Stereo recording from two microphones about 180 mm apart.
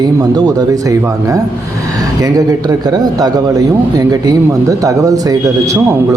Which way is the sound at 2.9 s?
20° right (ahead or behind).